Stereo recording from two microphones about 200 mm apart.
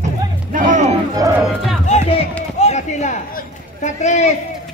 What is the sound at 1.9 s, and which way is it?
Music, 30° left (ahead or behind).